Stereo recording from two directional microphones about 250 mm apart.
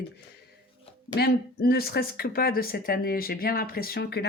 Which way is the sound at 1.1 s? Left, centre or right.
Left.